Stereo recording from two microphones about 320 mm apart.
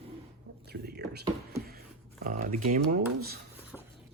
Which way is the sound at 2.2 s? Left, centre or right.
Right.